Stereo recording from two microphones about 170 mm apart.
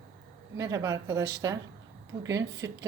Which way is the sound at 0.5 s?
20° right (ahead or behind).